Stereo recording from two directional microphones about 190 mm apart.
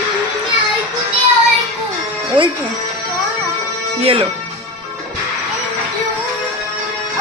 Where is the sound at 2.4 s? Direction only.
25° right (ahead or behind).